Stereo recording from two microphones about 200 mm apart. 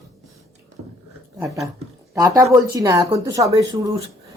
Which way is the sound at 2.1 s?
20° right (ahead or behind).